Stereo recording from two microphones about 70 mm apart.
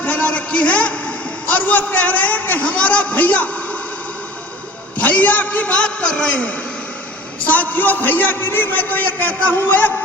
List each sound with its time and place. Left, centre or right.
0.0 s a man's voice: left
4.9 s a man's voice: left